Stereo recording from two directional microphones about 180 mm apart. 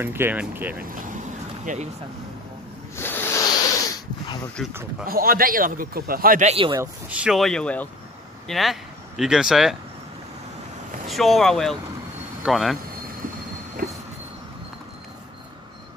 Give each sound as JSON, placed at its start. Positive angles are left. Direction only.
{"t": 0.0, "sound": "speech", "side_deg": -10}
{"t": 1.7, "sound": "a man's voice", "side_deg": -45}
{"t": 3.0, "sound": "rub", "side_deg": 10}
{"t": 4.6, "sound": "speech", "side_deg": 0}
{"t": 5.0, "sound": "a man's voice", "side_deg": -55}
{"t": 6.5, "sound": "speech", "side_deg": -30}
{"t": 6.8, "sound": "speech", "side_deg": -5}
{"t": 11.1, "sound": "speech", "side_deg": 0}